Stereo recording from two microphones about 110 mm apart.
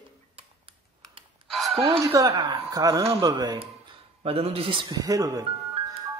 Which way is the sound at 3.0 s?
60° right (ahead or behind).